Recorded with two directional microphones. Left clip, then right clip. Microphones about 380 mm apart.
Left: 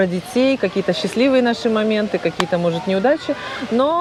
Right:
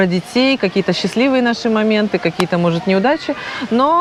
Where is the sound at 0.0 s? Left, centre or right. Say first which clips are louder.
Right 2 dB; centre.